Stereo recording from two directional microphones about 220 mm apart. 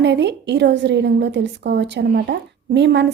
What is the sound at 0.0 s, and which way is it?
A woman's voice, 50° right (ahead or behind).